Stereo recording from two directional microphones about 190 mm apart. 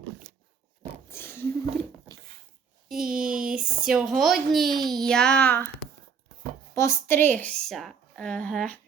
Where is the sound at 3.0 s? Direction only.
50° right (ahead or behind).